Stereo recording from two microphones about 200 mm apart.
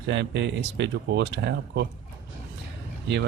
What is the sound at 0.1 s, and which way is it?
Speech, 60° right (ahead or behind).